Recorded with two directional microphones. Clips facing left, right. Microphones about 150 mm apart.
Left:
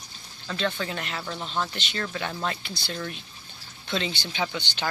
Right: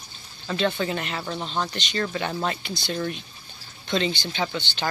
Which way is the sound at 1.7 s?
5° left (ahead or behind).